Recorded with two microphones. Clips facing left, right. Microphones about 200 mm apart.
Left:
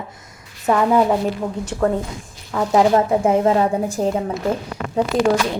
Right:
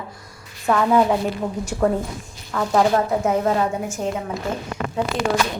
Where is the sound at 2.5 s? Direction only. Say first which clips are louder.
Left 3 dB; 15° left (ahead or behind).